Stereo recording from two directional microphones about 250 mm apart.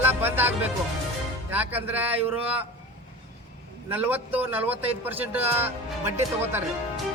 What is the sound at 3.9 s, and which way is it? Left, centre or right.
Speech, centre.